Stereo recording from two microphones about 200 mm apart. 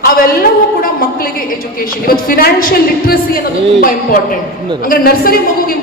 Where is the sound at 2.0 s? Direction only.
45° left (ahead or behind).